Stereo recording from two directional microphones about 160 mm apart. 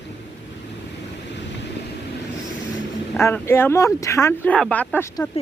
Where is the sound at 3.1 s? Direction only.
15° left (ahead or behind).